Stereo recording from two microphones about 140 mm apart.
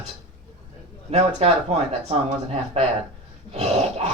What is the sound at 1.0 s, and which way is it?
Speech, 45° right (ahead or behind).